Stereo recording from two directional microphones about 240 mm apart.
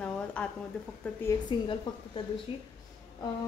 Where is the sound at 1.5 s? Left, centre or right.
Centre.